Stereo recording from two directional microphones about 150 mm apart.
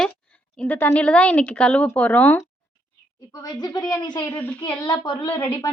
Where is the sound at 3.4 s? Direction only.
25° left (ahead or behind).